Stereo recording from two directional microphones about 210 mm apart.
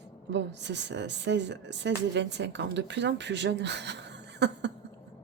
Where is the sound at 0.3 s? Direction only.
55° right (ahead or behind).